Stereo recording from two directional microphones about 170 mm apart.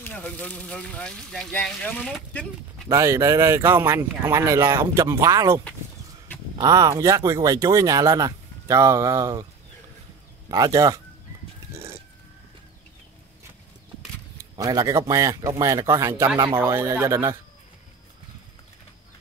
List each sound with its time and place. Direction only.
0.0 s speech: 10° left (ahead or behind)
2.9 s speech: 15° right (ahead or behind)
6.6 s speech: 20° right (ahead or behind)
10.5 s speech: 20° right (ahead or behind)
14.4 s speech: 20° right (ahead or behind)